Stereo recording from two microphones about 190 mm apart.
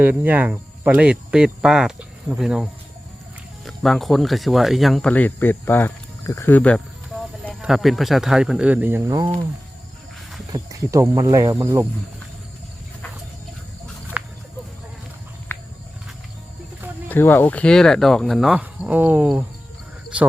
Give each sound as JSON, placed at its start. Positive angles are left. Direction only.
{"t": 0.0, "sound": "speech", "side_deg": -10}
{"t": 10.5, "sound": "speech", "side_deg": -15}
{"t": 14.2, "sound": "a sound", "side_deg": -10}
{"t": 15.5, "sound": "walk", "side_deg": 15}
{"t": 17.1, "sound": "speech", "side_deg": 10}